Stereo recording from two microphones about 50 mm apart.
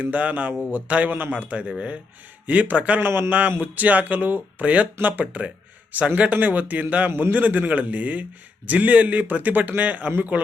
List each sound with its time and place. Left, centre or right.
0.0 s a man's voice: right
3.0 s a man's voice: right